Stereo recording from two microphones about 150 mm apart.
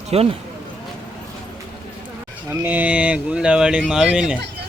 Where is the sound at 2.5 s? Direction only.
15° right (ahead or behind).